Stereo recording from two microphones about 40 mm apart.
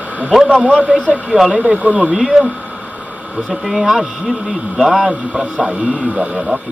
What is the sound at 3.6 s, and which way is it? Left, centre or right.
Speech, right.